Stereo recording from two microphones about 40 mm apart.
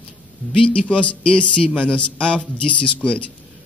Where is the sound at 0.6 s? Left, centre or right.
Left.